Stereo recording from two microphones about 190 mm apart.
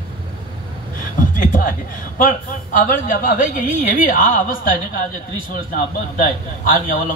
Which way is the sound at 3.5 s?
45° left (ahead or behind).